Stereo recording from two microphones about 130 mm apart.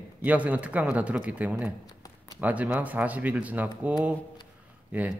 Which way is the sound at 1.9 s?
30° left (ahead or behind).